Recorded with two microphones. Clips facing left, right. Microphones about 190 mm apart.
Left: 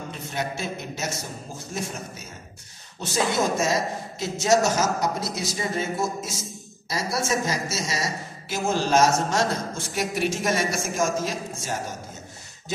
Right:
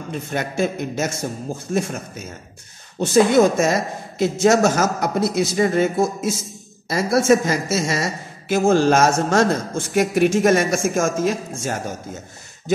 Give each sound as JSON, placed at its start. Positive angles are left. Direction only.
{"t": 0.1, "sound": "speech", "side_deg": -55}
{"t": 3.0, "sound": "speech", "side_deg": -55}